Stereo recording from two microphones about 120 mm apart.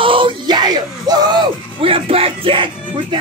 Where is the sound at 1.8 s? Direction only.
50° right (ahead or behind).